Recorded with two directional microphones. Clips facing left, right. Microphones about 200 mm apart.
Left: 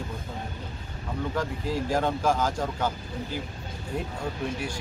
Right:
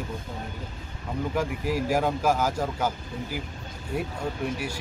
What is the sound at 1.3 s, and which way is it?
Speech, 10° right (ahead or behind).